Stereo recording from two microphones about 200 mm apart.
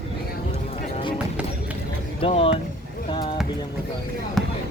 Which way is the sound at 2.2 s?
25° left (ahead or behind).